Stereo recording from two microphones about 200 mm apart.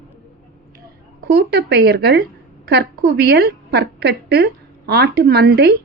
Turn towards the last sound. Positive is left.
turn(degrees=-55)  # may be behind; listen again after turning